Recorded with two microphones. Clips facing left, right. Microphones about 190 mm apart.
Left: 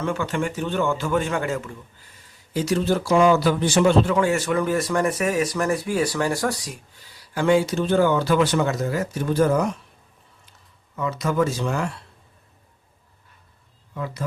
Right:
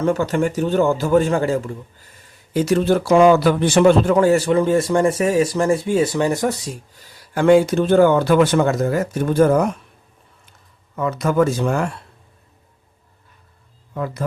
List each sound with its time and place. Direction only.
0.0 s speech: 40° right (ahead or behind)
2.5 s speech: 55° right (ahead or behind); by 6.7 s 25° right (ahead or behind)
7.3 s speech: 55° right (ahead or behind)
10.9 s speech: 55° right (ahead or behind)
13.9 s speech: 50° right (ahead or behind)